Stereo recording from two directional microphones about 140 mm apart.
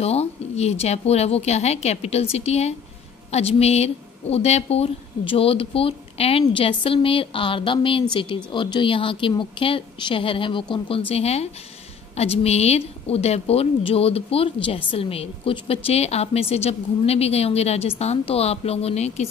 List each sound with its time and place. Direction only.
0.0 s a woman's voice: 50° left (ahead or behind)